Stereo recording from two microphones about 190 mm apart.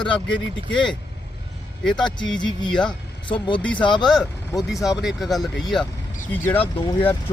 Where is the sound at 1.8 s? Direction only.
5° left (ahead or behind).